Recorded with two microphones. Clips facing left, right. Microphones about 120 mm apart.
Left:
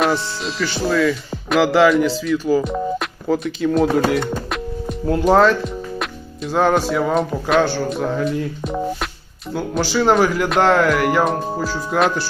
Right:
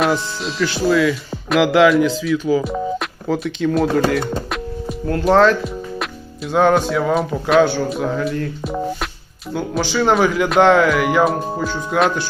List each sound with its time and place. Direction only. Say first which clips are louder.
0.0 s speech: right 1 dB; centre (ahead or behind)
4.4 s music: even; centre (ahead or behind)
5.2 s speech: right 1 dB; centre (ahead or behind)